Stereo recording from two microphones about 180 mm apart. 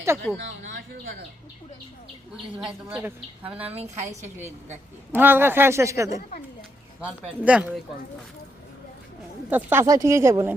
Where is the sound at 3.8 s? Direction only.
40° right (ahead or behind).